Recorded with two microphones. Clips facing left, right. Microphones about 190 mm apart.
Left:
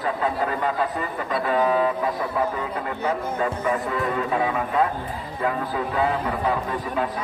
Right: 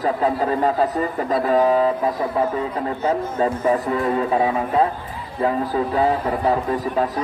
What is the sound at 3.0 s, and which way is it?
Speech, 30° right (ahead or behind).